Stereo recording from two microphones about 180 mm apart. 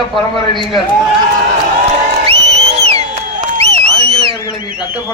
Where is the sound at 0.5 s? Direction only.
Centre (ahead or behind).